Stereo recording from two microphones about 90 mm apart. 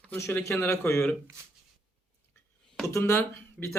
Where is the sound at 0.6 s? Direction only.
25° left (ahead or behind).